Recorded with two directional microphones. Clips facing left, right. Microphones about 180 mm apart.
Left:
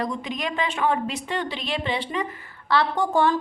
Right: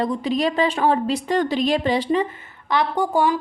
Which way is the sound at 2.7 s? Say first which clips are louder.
Right 1 dB; 15° right (ahead or behind).